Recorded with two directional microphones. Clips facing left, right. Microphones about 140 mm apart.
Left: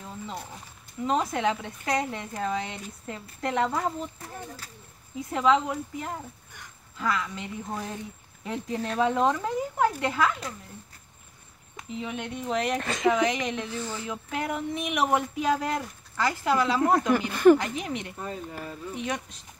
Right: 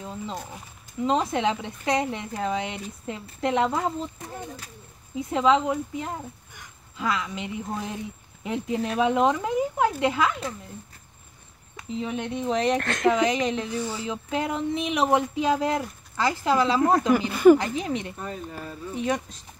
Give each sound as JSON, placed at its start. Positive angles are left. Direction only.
{"t": 1.0, "sound": "speech", "side_deg": -25}
{"t": 12.0, "sound": "speech", "side_deg": -35}
{"t": 12.7, "sound": "speech", "side_deg": 0}
{"t": 13.2, "sound": "speech", "side_deg": -30}
{"t": 13.7, "sound": "speech", "side_deg": -15}
{"t": 17.3, "sound": "speech", "side_deg": -10}
{"t": 17.6, "sound": "speech", "side_deg": -30}
{"t": 18.5, "sound": "speech", "side_deg": 10}